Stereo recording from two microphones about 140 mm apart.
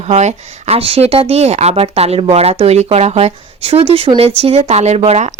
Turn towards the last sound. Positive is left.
turn(degrees=-50)  # may be behind; listen again after turning